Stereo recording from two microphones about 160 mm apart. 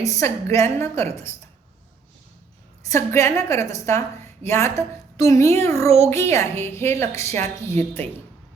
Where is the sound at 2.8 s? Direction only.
15° left (ahead or behind).